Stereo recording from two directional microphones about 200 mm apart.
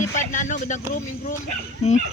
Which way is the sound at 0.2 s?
40° left (ahead or behind).